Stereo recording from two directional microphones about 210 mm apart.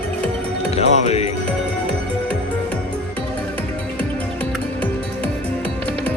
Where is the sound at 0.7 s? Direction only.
30° left (ahead or behind).